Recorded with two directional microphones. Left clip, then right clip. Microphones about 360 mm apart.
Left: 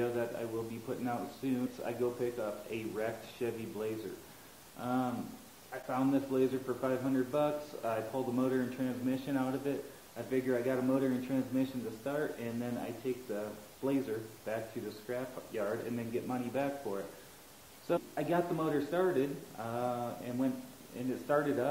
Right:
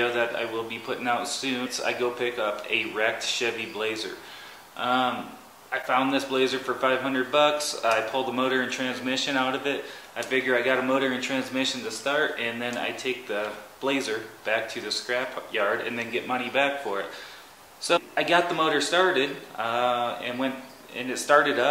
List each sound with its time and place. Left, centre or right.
0.0 s a man's voice: centre
8.1 s speech: right
8.4 s a man's voice: centre